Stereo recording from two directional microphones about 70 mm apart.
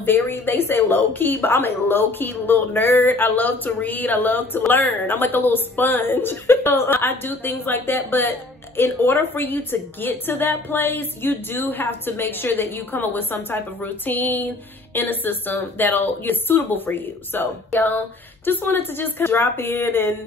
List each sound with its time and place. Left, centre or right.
0.0 s a woman's voice: left